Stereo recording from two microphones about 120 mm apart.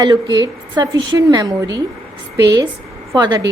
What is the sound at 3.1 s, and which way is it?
Speech, 35° right (ahead or behind).